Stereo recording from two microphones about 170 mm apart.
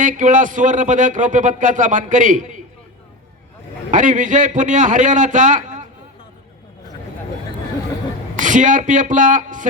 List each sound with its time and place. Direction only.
0.0 s speech: 50° right (ahead or behind)
3.9 s speech: 50° right (ahead or behind)
8.4 s speech: 50° right (ahead or behind)